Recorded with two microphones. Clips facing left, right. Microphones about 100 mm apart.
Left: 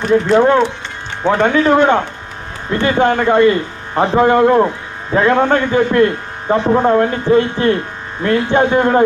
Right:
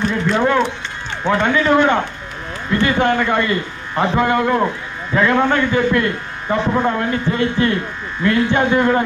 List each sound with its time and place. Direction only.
0.1 s speech: 25° left (ahead or behind)